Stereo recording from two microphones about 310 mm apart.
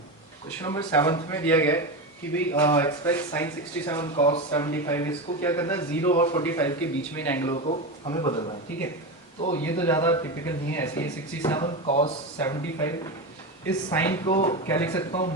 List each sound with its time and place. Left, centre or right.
0.6 s speech: centre
7.5 s speech: centre
13.7 s speech: centre
14.3 s speech: centre
14.7 s speech: centre